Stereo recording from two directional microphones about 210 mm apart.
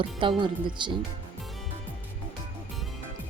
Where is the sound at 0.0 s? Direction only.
25° right (ahead or behind).